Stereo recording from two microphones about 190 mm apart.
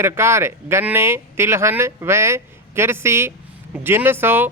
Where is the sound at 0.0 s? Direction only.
15° right (ahead or behind).